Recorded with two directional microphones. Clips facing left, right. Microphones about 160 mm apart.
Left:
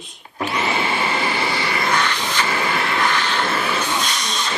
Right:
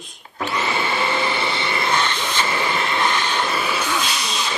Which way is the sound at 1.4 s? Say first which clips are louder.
Left 1 dB; 25° right (ahead or behind).